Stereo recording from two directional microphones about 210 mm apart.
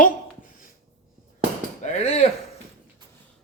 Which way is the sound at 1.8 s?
35° left (ahead or behind).